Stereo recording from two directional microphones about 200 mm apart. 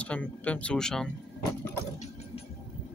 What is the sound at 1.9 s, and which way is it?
Vehicle, 35° left (ahead or behind).